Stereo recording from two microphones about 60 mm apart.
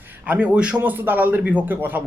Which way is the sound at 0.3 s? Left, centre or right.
Right.